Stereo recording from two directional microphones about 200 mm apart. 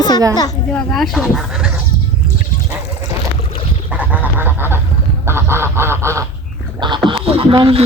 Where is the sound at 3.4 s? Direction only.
30° left (ahead or behind).